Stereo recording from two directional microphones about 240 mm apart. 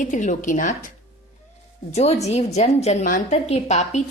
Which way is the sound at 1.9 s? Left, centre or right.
Left.